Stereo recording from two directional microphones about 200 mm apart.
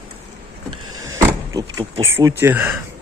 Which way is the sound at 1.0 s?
15° right (ahead or behind).